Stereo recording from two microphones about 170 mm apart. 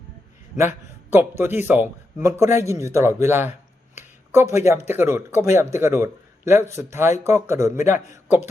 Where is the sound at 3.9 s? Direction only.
15° right (ahead or behind).